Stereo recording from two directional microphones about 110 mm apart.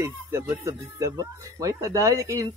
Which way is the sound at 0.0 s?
25° right (ahead or behind).